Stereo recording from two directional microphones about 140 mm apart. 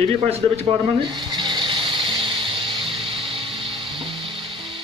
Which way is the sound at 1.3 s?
30° right (ahead or behind).